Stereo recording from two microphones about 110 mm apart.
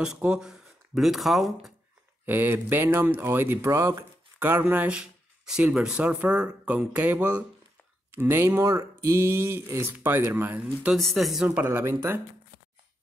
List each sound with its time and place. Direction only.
0.0 s speech: 5° right (ahead or behind)
2.2 s speech: 20° right (ahead or behind)
4.4 s speech: 15° right (ahead or behind)
10.9 s speech: centre (ahead or behind)
11.4 s speech: 15° right (ahead or behind)